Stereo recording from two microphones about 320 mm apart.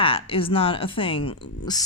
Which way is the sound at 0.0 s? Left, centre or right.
Centre.